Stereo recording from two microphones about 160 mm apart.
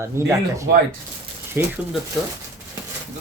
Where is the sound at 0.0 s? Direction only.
15° right (ahead or behind).